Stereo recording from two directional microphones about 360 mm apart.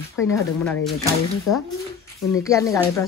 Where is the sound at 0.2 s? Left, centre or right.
Centre.